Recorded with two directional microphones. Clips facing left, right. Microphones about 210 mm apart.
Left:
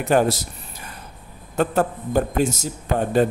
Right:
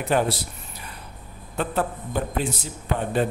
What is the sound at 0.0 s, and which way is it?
A man's voice, 45° left (ahead or behind).